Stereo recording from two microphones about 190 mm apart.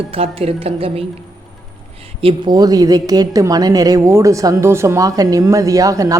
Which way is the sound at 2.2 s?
25° right (ahead or behind).